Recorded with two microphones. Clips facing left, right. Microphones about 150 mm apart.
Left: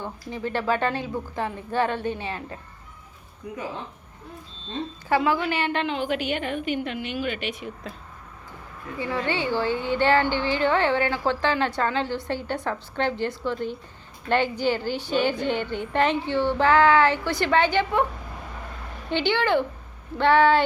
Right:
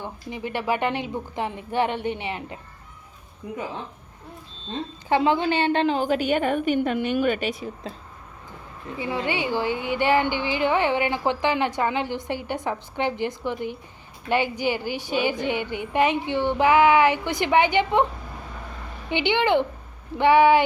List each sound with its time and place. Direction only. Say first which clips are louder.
0.0 s a woman's voice: left 1 dB; 15° right (ahead or behind)
5.0 s a woman's voice: right 2 dB; 25° right (ahead or behind)
9.0 s a woman's voice: even; 15° right (ahead or behind)